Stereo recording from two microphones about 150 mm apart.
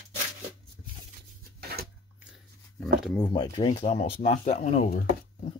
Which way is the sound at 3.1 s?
25° left (ahead or behind).